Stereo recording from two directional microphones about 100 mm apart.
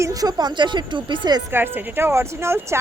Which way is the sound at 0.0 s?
35° right (ahead or behind).